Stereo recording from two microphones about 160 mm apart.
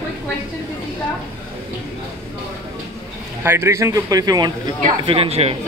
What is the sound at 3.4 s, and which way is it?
A man's voice, 15° right (ahead or behind).